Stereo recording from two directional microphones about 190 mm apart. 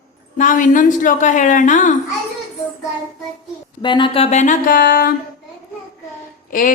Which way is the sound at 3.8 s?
25° left (ahead or behind).